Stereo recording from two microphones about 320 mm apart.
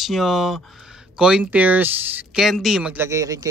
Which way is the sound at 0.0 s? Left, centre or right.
Centre.